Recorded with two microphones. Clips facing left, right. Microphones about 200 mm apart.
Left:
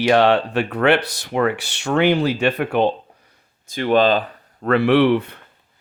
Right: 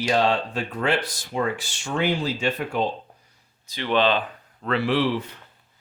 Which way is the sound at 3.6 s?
50° left (ahead or behind).